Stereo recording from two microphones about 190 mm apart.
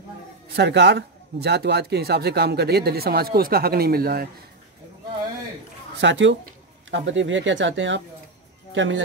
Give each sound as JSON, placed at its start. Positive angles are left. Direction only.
{"t": 0.6, "sound": "a man's voice", "side_deg": -65}
{"t": 5.9, "sound": "speech", "side_deg": -70}